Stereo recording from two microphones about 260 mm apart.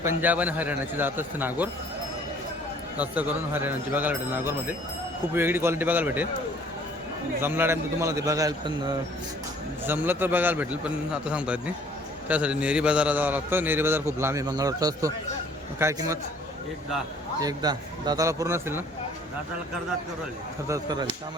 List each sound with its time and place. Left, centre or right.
0.0 s a man's voice: centre
3.0 s a man's voice: centre
7.4 s a man's voice: centre
17.4 s a man's voice: centre
20.7 s a man's voice: centre